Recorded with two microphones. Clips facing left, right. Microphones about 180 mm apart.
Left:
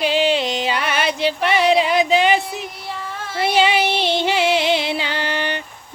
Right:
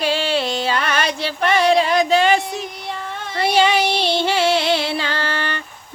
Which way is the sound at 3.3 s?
15° left (ahead or behind).